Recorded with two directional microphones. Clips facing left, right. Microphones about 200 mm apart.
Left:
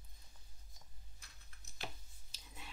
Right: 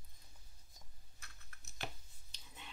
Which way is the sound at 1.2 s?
65° right (ahead or behind).